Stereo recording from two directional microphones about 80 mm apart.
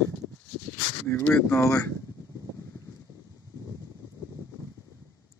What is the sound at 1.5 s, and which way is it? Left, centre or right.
Speech, left.